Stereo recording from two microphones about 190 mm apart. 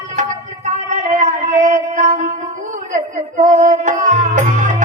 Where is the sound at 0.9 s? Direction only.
40° right (ahead or behind).